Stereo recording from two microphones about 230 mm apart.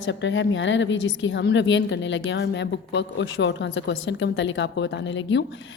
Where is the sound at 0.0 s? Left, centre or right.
Left.